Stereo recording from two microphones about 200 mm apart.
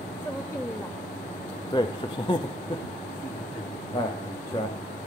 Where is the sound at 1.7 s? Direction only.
25° left (ahead or behind).